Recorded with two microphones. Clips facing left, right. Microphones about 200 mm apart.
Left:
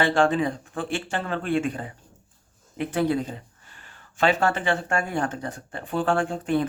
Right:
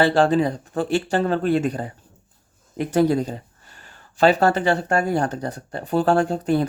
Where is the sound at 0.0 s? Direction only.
35° right (ahead or behind).